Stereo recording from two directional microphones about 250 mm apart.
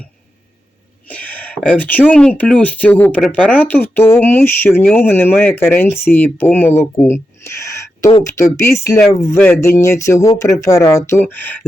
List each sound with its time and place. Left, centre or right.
1.0 s speech: centre